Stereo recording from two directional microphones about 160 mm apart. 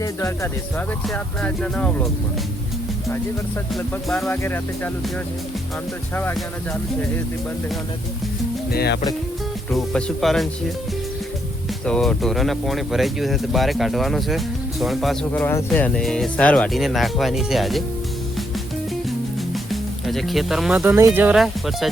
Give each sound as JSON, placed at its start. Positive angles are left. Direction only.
{"t": 0.0, "sound": "speech", "side_deg": 15}
{"t": 1.0, "sound": "speech", "side_deg": 5}
{"t": 3.8, "sound": "speech", "side_deg": 5}
{"t": 4.3, "sound": "speech", "side_deg": 15}
{"t": 8.7, "sound": "speech", "side_deg": 85}
{"t": 9.7, "sound": "speech", "side_deg": 0}
{"t": 11.9, "sound": "speech", "side_deg": 5}
{"t": 19.7, "sound": "speech", "side_deg": 0}
{"t": 20.7, "sound": "speech", "side_deg": -15}
{"t": 21.3, "sound": "speech", "side_deg": 0}